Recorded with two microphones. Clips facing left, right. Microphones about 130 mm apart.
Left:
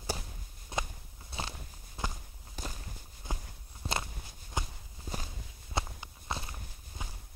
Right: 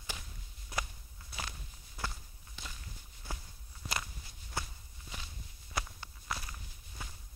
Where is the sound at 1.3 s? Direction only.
25° left (ahead or behind).